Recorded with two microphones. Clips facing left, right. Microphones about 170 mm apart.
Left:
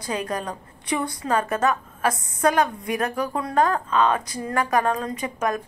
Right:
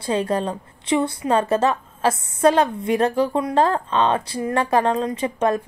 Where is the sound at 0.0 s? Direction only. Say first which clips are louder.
Right 6 dB; 30° right (ahead or behind).